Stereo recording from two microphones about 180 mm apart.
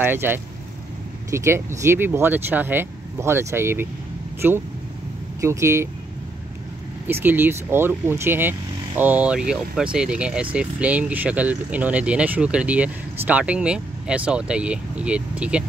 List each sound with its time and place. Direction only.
0.0 s speech: 10° right (ahead or behind)
7.1 s speech: 10° right (ahead or behind)